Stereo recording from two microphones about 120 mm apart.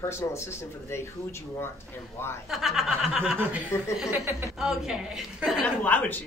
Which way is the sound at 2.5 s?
Centre (ahead or behind).